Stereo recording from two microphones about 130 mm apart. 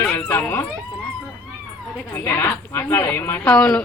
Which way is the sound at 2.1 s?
20° left (ahead or behind).